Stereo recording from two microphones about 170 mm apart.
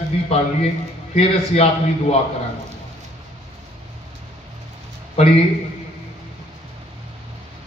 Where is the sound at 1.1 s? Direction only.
35° left (ahead or behind).